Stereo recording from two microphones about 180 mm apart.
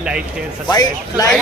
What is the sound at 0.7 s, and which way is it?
Speech, 20° left (ahead or behind).